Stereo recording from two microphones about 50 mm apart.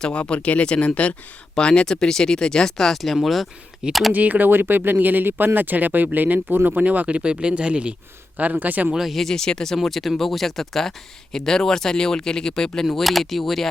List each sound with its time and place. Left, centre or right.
0.0 s speech: left; by 3.5 s centre
4.1 s speech: right
8.4 s speech: right
9.0 s speech: centre
9.7 s speech: centre